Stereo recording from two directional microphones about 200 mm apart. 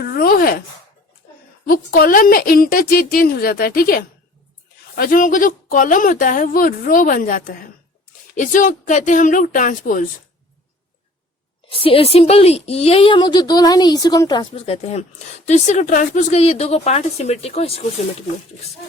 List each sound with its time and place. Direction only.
0.0 s chopping: 50° left (ahead or behind)
1.6 s a woman's voice: 45° left (ahead or behind)
11.7 s a woman's voice: 30° left (ahead or behind)